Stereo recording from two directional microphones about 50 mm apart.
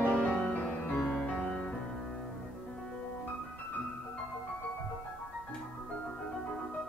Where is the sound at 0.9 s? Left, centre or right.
Left.